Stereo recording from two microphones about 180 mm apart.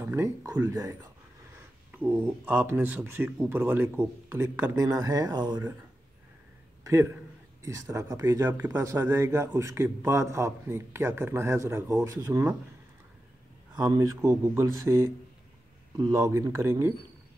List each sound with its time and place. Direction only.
0.0 s speech: 15° right (ahead or behind)
6.8 s a sound: 15° right (ahead or behind)
7.6 s speech: 15° right (ahead or behind)
13.7 s speech: 20° right (ahead or behind)
16.1 s speech: 15° right (ahead or behind)